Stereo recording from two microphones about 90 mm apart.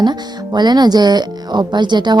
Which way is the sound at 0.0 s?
55° right (ahead or behind).